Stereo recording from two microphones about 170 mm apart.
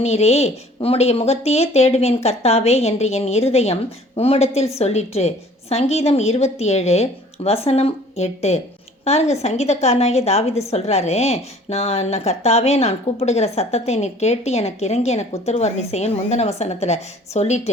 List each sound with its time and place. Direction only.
0.0 s a woman's voice: 40° left (ahead or behind)